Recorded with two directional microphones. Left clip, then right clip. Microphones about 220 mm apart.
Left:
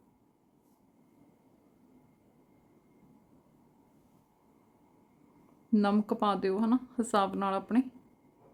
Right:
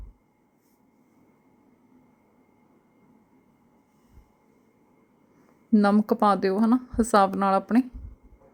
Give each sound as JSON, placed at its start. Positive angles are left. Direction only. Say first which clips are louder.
{"t": 5.7, "sound": "speech", "louder": "right 7 dB", "side_deg": -15}